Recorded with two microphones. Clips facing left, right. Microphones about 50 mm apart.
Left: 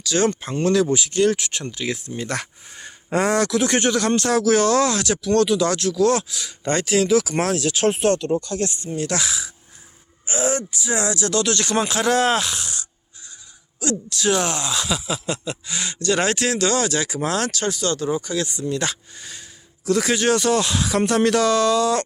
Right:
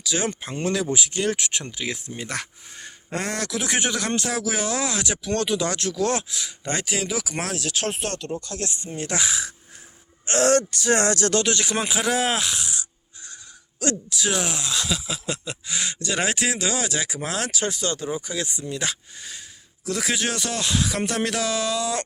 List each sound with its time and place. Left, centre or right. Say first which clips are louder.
0.0 s speech: left 6 dB; centre
2.3 s speech: left 4 dB; centre; by 6.2 s right
6.3 s speech: left 5 dB; centre
8.7 s speech: left 4 dB; centre
9.0 s speech: left 2 dB; right
10.2 s speech: right 4 dB; right
11.4 s speech: left 3 dB; centre
14.1 s speech: left 5 dB; centre
18.7 s speech: left 4 dB; centre